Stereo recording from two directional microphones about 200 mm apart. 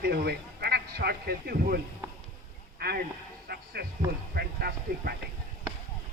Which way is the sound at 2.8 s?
50° right (ahead or behind).